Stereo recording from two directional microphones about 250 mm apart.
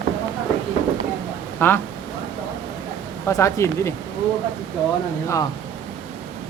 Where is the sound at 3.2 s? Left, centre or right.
Centre.